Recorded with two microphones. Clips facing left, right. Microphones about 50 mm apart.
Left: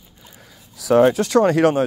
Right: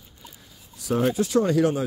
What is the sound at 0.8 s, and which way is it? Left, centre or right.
Speech, left.